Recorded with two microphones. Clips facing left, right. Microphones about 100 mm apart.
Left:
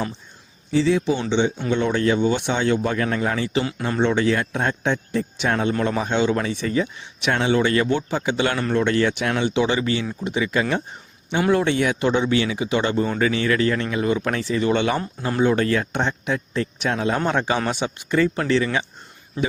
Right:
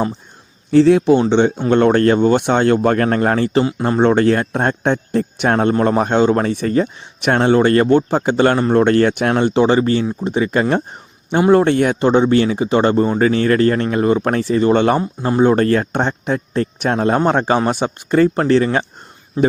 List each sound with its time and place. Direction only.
0.7 s speech: 60° right (ahead or behind)
3.6 s speech: 30° right (ahead or behind)
3.8 s speech: 45° right (ahead or behind)
5.7 s speech: 40° right (ahead or behind)
19.4 s speech: 30° right (ahead or behind)